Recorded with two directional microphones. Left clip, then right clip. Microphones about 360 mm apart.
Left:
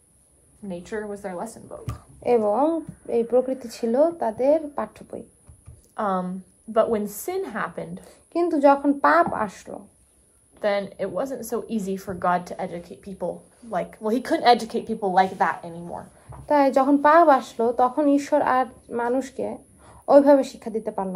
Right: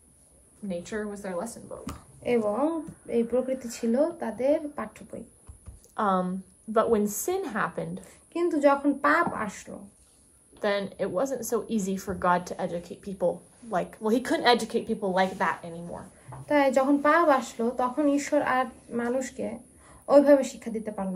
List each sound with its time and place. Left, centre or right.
0.7 s a woman's voice: centre
3.1 s speech: centre
5.9 s a woman's voice: centre
8.4 s speech: centre
10.6 s a woman's voice: centre
16.4 s speech: centre